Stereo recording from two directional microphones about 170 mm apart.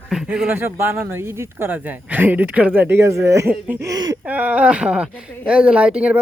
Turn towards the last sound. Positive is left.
turn(degrees=-10)  # may be behind; listen again after turning